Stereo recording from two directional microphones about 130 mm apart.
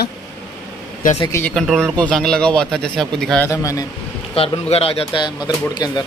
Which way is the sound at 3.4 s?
25° left (ahead or behind).